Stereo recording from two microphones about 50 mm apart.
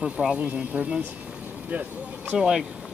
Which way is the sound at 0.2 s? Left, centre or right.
Centre.